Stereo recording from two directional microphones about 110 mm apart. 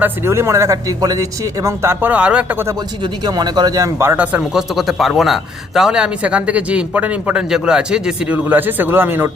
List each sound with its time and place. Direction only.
0.0 s speech: 25° right (ahead or behind)
3.0 s speech: 40° right (ahead or behind); by 4.6 s 15° right (ahead or behind)
4.7 s a man's voice: centre (ahead or behind)
8.4 s speech: 15° right (ahead or behind)